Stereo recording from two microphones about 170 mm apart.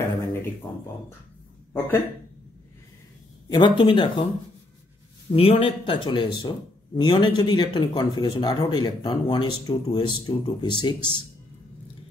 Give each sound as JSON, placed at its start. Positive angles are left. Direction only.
{"t": 1.7, "sound": "speech", "side_deg": 15}
{"t": 3.4, "sound": "speech", "side_deg": 25}
{"t": 5.3, "sound": "speech", "side_deg": 35}